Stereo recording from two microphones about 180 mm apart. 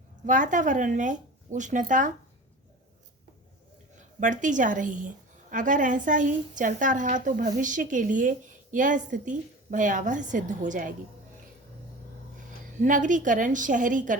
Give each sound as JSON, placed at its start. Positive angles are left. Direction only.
{"t": 0.3, "sound": "a woman's voice", "side_deg": -45}
{"t": 3.9, "sound": "a woman's voice", "side_deg": -45}
{"t": 12.8, "sound": "a woman's voice", "side_deg": -45}